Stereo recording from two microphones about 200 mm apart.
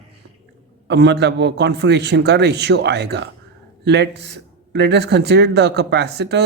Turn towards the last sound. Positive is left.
turn(degrees=-55)  # may be behind; listen again after turning